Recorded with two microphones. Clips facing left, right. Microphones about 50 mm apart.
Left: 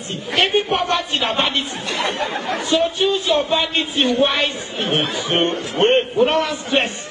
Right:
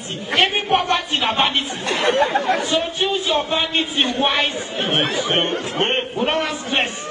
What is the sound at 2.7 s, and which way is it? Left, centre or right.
A man's voice, centre.